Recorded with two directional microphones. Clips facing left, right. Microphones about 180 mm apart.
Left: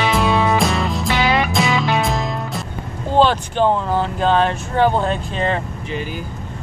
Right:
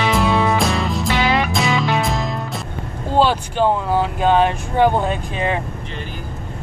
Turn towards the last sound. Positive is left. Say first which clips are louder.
# left 1 dB
turn(degrees=-10)  # may be behind; listen again after turning